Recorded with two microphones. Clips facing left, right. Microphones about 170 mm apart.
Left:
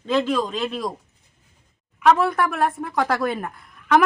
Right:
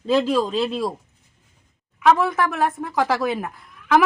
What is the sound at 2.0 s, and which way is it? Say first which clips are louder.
Speech: even; centre (ahead or behind).